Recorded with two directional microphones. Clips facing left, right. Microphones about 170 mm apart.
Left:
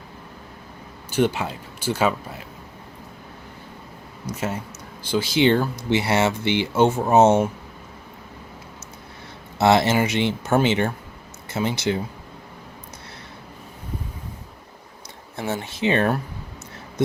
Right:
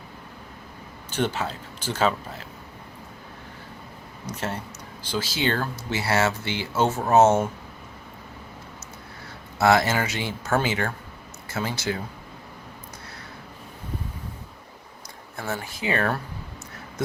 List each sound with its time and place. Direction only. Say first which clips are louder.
1.1 s speech: left 5 dB; 10° left (ahead or behind)
4.3 s speech: left 3 dB; 10° left (ahead or behind)
9.6 s speech: left 3 dB; 25° left (ahead or behind)
15.4 s speech: left 5 dB; 20° left (ahead or behind)